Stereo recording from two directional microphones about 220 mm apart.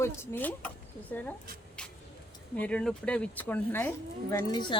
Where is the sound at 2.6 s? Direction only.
5° left (ahead or behind).